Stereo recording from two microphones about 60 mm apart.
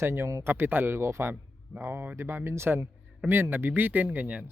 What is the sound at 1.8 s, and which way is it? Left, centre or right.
Speech, right.